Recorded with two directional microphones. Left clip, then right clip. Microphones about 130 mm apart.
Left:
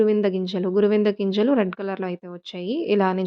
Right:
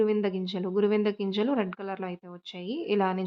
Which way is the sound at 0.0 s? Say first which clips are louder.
Left 6 dB; 40° left (ahead or behind).